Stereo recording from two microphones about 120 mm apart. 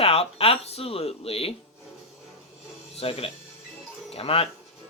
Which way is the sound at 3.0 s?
55° left (ahead or behind).